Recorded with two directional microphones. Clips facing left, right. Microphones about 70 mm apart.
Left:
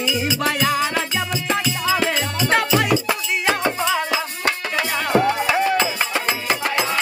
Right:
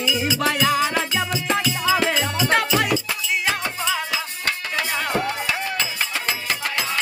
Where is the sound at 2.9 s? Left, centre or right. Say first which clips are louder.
Left 3 dB; left.